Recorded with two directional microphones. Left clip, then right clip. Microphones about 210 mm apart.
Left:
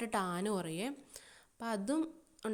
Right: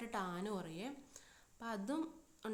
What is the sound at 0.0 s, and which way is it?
A woman's voice, 35° left (ahead or behind).